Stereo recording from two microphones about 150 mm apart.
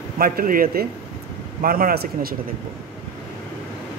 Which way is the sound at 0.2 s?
75° right (ahead or behind).